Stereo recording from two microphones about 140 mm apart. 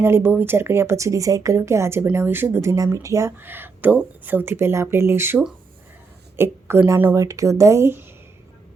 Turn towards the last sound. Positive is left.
turn(degrees=-20)  # may be behind; listen again after turning